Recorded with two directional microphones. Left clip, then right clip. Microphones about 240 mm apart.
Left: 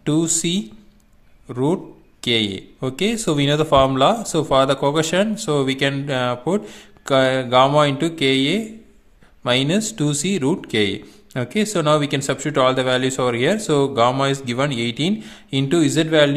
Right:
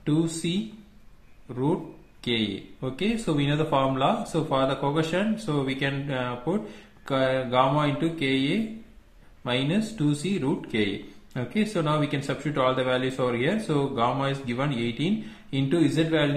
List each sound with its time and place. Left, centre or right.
0.0 s speech: left